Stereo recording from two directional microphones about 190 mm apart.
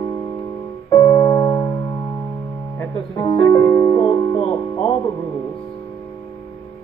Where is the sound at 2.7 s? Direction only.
15° left (ahead or behind).